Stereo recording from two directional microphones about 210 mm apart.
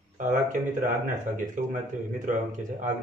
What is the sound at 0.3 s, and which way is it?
Speech, 40° right (ahead or behind).